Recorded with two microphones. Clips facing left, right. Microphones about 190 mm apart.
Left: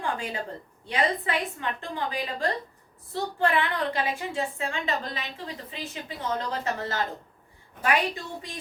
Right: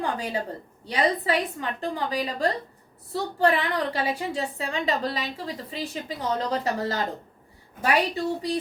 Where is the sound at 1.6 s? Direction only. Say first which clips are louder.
Right 3 dB; 40° right (ahead or behind).